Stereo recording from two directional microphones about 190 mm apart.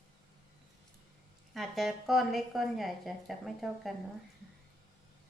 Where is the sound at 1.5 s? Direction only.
Centre (ahead or behind).